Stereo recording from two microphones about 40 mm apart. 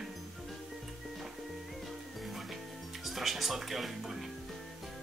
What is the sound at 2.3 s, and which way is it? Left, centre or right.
Music, centre.